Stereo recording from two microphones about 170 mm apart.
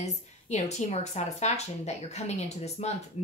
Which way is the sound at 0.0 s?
40° left (ahead or behind).